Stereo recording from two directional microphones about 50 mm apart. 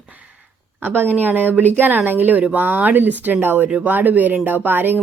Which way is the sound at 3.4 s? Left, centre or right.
Right.